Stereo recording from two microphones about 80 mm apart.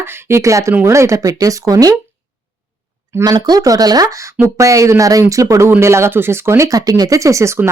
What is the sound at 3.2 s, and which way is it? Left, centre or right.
Speech, right.